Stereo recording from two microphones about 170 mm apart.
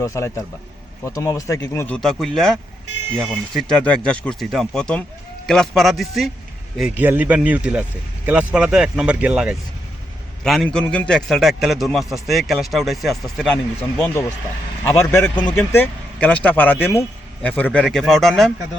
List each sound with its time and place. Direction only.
0.0 s a man's voice: 20° left (ahead or behind)
14.8 s speech: 20° left (ahead or behind)
15.7 s a man's voice: 10° left (ahead or behind)